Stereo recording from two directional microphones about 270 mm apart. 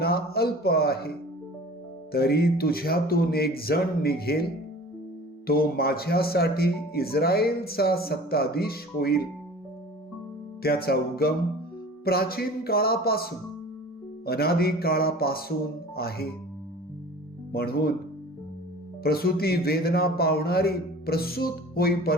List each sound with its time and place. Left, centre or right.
0.0 s speech: left
2.1 s speech: left
5.5 s speech: left
10.6 s speech: left
14.3 s speech: left
17.5 s speech: left
19.0 s speech: left